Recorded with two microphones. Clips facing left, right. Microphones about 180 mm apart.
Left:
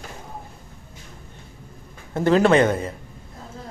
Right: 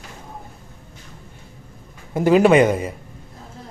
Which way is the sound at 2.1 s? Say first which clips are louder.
Right 3 dB; 10° right (ahead or behind).